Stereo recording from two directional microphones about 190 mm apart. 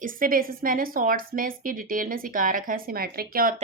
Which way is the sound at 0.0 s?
45° right (ahead or behind).